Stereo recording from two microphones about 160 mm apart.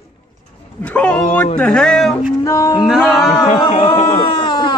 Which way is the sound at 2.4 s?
20° left (ahead or behind).